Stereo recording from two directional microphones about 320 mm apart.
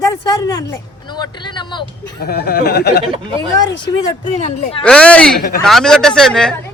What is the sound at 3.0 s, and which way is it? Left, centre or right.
Speech, centre.